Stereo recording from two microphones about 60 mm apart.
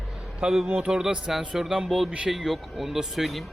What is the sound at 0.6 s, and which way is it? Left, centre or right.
Speech, right.